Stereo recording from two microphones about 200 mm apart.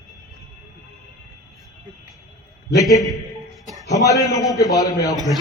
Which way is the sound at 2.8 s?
15° left (ahead or behind).